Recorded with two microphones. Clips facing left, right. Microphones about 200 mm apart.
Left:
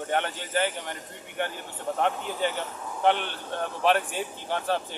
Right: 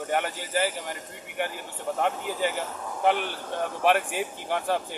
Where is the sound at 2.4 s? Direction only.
10° right (ahead or behind).